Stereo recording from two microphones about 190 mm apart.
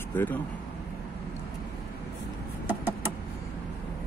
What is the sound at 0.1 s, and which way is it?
Speech, 10° left (ahead or behind).